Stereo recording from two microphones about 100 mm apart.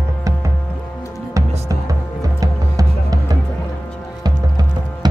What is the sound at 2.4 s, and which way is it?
Music, 40° right (ahead or behind).